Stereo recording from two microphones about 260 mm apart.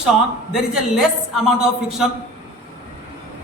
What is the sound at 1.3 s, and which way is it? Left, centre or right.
Speech, centre.